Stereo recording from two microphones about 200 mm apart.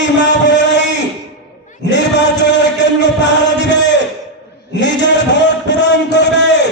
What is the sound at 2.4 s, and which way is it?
Chant, 60° left (ahead or behind).